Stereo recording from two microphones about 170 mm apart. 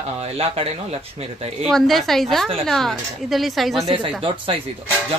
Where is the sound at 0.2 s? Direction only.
35° right (ahead or behind).